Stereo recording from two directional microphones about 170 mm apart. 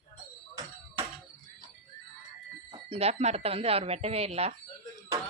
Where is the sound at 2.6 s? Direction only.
35° right (ahead or behind).